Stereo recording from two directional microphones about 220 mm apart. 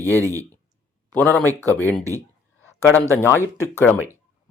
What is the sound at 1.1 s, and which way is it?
A man's voice, 5° left (ahead or behind).